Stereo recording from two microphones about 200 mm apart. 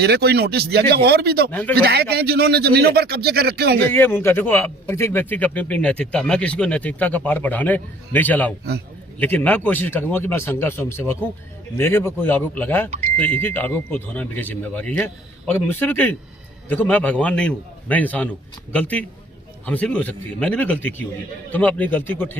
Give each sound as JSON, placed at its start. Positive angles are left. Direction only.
{"t": 0.0, "sound": "a man's voice", "side_deg": -55}
{"t": 1.5, "sound": "a man's voice", "side_deg": 10}
{"t": 1.7, "sound": "a man's voice", "side_deg": -50}
{"t": 3.8, "sound": "a man's voice", "side_deg": 10}